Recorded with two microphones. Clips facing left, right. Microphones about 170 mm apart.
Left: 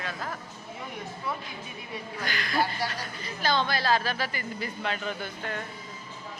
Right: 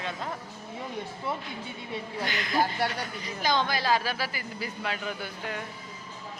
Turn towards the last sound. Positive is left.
turn(degrees=-10)  # may be behind; listen again after turning